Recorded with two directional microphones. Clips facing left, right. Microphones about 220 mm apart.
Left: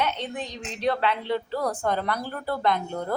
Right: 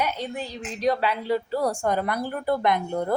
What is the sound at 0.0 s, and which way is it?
A woman's voice, 10° right (ahead or behind).